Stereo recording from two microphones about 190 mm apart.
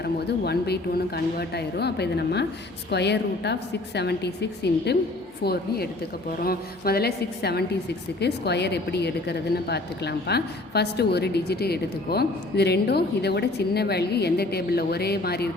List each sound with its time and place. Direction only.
0.0 s a woman's voice: 60° left (ahead or behind)